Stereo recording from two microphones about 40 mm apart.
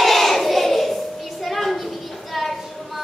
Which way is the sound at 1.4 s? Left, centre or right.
Centre.